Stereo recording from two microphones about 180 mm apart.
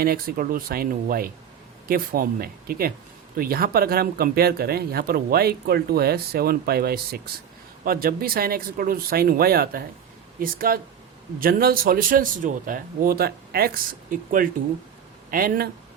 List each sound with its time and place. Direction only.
0.0 s speech: 55° right (ahead or behind)